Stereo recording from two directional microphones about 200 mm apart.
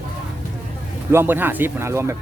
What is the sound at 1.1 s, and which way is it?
Speech, 10° right (ahead or behind).